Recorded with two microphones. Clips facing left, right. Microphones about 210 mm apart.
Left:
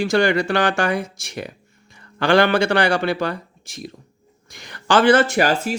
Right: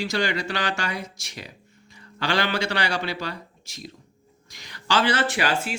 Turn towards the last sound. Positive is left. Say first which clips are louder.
# left 6 dB
turn(degrees=40)  # may be behind; listen again after turning